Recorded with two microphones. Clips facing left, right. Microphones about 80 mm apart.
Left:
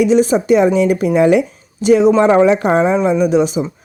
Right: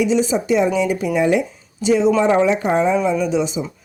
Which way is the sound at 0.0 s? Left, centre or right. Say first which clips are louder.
Left 5 dB; left.